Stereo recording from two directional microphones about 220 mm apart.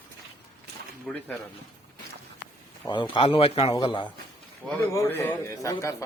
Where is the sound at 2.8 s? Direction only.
20° left (ahead or behind).